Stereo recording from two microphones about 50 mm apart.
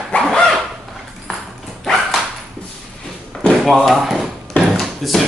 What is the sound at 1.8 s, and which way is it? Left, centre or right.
Dog, centre.